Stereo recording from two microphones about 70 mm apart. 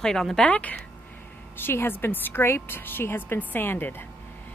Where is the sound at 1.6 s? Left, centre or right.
Left.